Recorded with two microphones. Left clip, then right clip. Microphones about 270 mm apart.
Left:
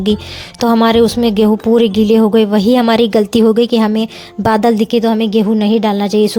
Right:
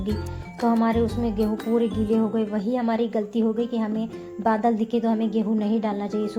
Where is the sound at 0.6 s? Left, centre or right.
Left.